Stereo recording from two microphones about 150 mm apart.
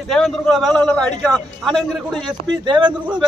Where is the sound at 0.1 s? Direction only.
5° left (ahead or behind).